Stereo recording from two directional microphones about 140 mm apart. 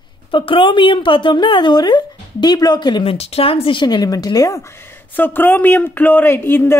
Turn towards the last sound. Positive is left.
turn(degrees=15)  # may be behind; listen again after turning